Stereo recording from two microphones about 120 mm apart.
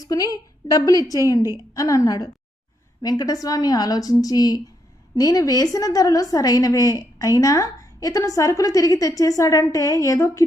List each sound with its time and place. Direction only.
0.0 s a woman's voice: 30° left (ahead or behind)